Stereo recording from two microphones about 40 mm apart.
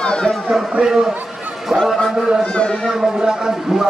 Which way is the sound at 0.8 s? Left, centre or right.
Centre.